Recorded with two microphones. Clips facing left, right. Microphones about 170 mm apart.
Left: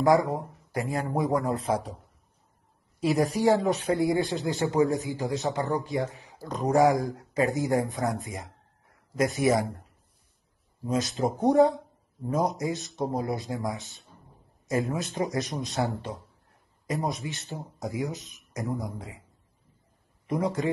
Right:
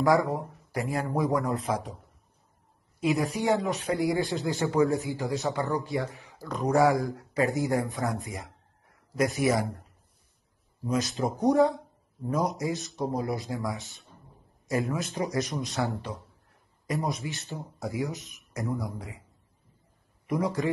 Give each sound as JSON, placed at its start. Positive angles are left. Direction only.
{"t": 0.0, "sound": "a man's voice", "side_deg": 20}
{"t": 1.5, "sound": "speech", "side_deg": 35}
{"t": 3.0, "sound": "speech", "side_deg": 35}
{"t": 4.0, "sound": "a man's voice", "side_deg": 20}
{"t": 10.9, "sound": "a man's voice", "side_deg": 20}
{"t": 16.8, "sound": "a man's voice", "side_deg": 20}
{"t": 20.2, "sound": "a man's voice", "side_deg": 20}